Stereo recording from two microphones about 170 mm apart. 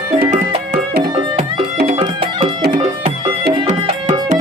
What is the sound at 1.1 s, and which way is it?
Music, 30° right (ahead or behind).